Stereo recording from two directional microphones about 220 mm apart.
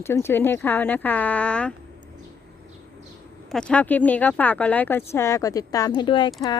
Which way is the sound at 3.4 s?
5° left (ahead or behind).